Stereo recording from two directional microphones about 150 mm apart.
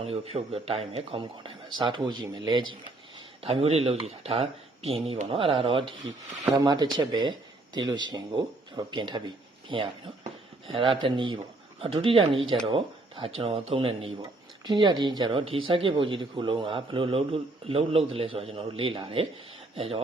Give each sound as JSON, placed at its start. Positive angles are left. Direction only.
{"t": 0.0, "sound": "speech", "side_deg": -40}